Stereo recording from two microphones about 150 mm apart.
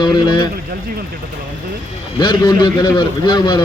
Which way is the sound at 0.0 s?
30° left (ahead or behind).